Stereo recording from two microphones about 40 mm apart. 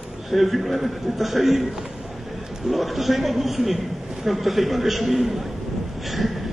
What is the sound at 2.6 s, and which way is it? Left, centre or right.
A man's voice, centre.